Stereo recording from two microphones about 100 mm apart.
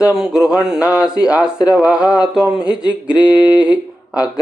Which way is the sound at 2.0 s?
40° left (ahead or behind).